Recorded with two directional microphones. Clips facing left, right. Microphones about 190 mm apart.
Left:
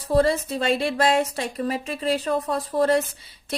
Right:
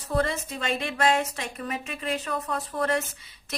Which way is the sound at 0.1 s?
35° left (ahead or behind).